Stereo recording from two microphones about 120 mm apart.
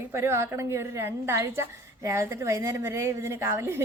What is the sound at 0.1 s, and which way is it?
A woman's voice, 20° right (ahead or behind).